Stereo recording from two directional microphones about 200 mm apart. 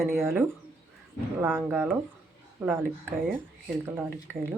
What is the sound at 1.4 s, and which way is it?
Speech, 10° right (ahead or behind).